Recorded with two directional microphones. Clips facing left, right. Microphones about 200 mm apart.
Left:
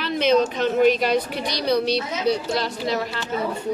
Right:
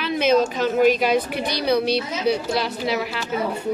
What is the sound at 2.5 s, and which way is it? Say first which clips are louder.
Speech: right 1 dB; 5° right (ahead or behind).